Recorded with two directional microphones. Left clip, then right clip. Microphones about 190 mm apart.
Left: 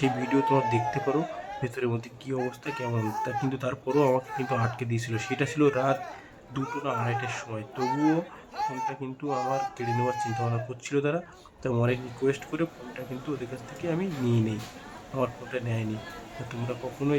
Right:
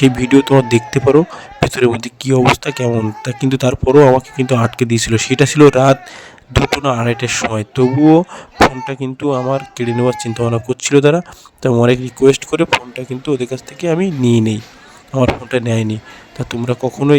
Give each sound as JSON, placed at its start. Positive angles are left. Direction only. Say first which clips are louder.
{"t": 0.0, "sound": "speech", "louder": "right 14 dB", "side_deg": -60}
{"t": 8.9, "sound": "speech", "louder": "right 14 dB", "side_deg": -60}